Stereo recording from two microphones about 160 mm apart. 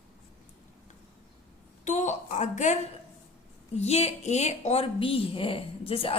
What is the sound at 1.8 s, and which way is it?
Speech, 50° left (ahead or behind).